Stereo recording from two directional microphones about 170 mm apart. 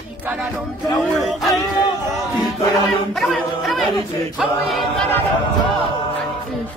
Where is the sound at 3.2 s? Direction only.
Centre (ahead or behind).